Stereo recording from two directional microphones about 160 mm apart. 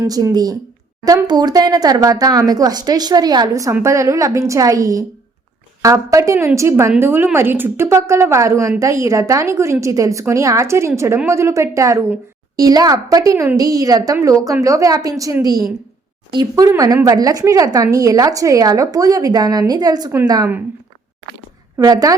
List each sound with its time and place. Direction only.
0.0 s a woman's voice: 20° right (ahead or behind)
21.8 s a woman's voice: 20° right (ahead or behind)